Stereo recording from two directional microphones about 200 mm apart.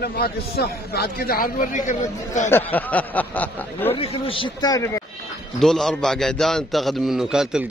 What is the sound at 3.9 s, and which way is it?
Speech, 30° left (ahead or behind).